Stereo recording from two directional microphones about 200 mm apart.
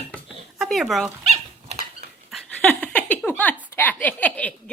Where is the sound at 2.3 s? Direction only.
5° left (ahead or behind).